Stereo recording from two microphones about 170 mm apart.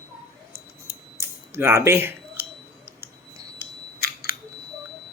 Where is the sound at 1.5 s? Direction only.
15° right (ahead or behind).